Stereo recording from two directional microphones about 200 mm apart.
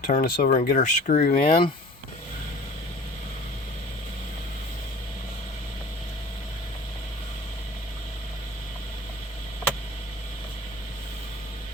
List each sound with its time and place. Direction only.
0.0 s speech: 45° left (ahead or behind)